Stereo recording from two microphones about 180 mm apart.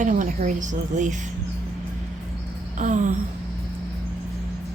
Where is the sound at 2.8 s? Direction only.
45° right (ahead or behind).